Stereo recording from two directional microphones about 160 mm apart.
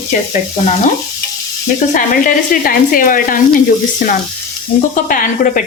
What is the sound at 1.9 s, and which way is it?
A woman's voice, 60° left (ahead or behind).